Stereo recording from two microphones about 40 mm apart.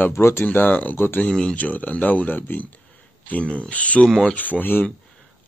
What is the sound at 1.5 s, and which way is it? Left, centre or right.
Speech, left.